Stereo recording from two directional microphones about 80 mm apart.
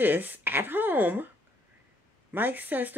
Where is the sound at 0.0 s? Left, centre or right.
Right.